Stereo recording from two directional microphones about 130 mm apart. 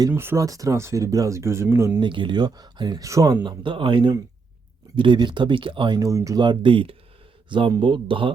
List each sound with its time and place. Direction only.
0.1 s speech: 15° right (ahead or behind)
2.0 s speech: 40° right (ahead or behind)
3.0 s speech: 25° right (ahead or behind)
3.4 s speech: 40° right (ahead or behind)
6.0 s speech: 25° right (ahead or behind)
6.4 s speech: 40° right (ahead or behind)